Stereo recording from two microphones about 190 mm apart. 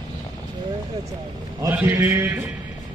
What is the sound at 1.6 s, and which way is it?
Mantra, 10° right (ahead or behind).